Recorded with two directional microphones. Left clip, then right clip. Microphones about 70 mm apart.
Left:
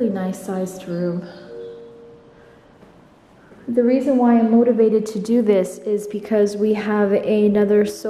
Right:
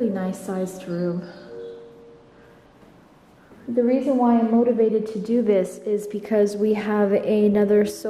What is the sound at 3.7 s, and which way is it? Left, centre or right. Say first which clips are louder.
Speech: left 3 dB; left.